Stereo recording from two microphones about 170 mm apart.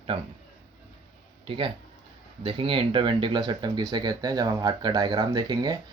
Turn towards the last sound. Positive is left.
turn(degrees=-25)  # may be behind; listen again after turning